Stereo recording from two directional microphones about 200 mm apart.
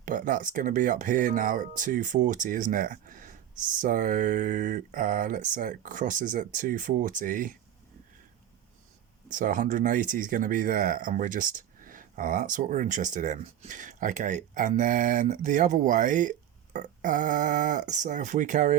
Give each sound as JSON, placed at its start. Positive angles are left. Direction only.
{"t": 0.0, "sound": "speech", "side_deg": -40}
{"t": 9.3, "sound": "speech", "side_deg": -40}